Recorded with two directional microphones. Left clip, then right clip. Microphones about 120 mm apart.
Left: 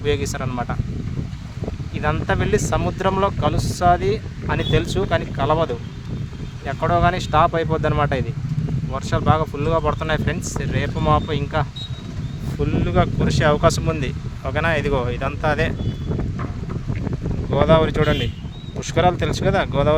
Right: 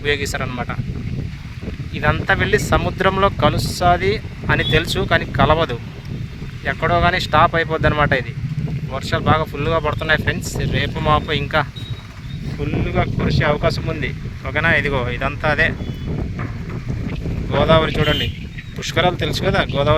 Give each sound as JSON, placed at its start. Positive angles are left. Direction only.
{"t": 0.0, "sound": "speech", "side_deg": -5}
{"t": 2.0, "sound": "speech", "side_deg": 0}
{"t": 12.5, "sound": "speech", "side_deg": 50}
{"t": 14.5, "sound": "speech", "side_deg": 20}
{"t": 17.5, "sound": "speech", "side_deg": 15}